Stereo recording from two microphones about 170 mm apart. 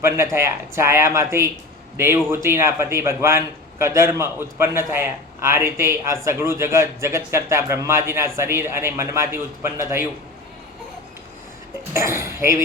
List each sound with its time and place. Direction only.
0.3 s a man's voice: 15° right (ahead or behind)
11.9 s a man's voice: 15° right (ahead or behind)